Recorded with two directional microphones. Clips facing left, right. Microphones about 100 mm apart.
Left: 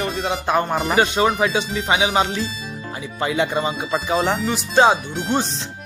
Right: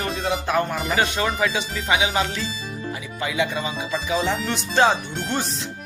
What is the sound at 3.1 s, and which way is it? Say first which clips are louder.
Speech: left 4 dB; 35° left (ahead or behind).